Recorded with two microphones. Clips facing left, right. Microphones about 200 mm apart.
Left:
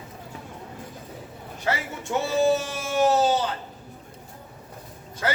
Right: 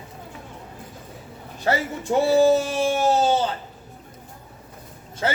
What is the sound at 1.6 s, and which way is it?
Speech, 35° right (ahead or behind).